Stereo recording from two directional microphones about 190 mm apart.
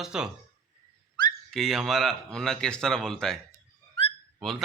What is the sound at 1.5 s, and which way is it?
Speech, centre (ahead or behind).